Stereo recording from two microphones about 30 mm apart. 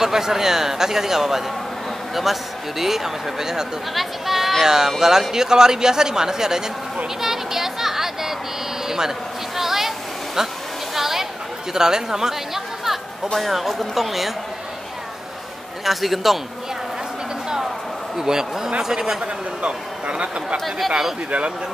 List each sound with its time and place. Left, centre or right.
0.0 s a man's voice: centre
2.8 s a man's voice: centre
3.9 s speech: centre
4.6 s a man's voice: centre
7.2 s a sound: centre
8.8 s vehicle: centre
9.6 s a sound: centre
11.7 s speech: centre
15.8 s speech: centre
18.1 s a man's voice: centre
19.6 s speech: right
20.5 s speech: centre